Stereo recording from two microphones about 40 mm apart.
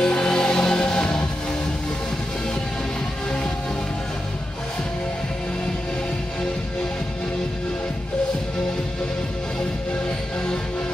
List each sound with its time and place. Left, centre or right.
0.0 s music: centre